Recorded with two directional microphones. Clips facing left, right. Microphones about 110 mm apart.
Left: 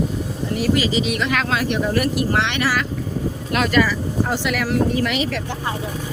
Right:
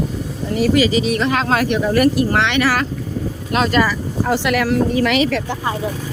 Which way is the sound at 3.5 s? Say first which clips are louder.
Right 2 dB; 30° right (ahead or behind).